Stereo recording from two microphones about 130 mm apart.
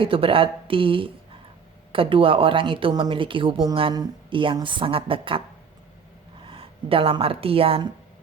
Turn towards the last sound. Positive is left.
turn(degrees=-45)  # may be behind; listen again after turning